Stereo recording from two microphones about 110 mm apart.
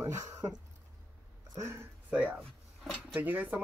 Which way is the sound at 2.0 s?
15° right (ahead or behind).